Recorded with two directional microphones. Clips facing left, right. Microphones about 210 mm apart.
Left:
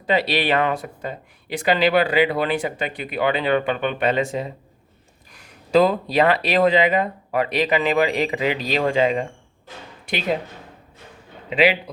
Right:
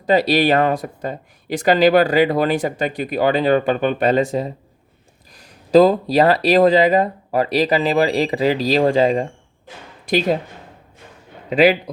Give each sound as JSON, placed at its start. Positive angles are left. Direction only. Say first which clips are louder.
{"t": 0.0, "sound": "speech", "louder": "right 5 dB", "side_deg": -40}
{"t": 11.4, "sound": "a man's voice", "louder": "right 4 dB", "side_deg": -40}